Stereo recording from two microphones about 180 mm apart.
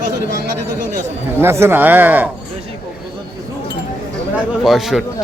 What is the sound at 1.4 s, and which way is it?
Speech, 15° right (ahead or behind).